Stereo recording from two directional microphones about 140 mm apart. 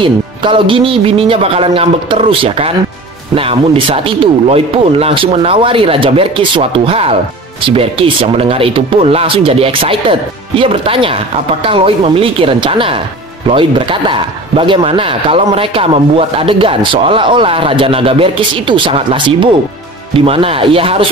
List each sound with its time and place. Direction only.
0.0 s speech: 35° right (ahead or behind)